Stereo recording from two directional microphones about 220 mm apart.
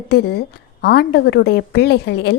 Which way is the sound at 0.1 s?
45° left (ahead or behind).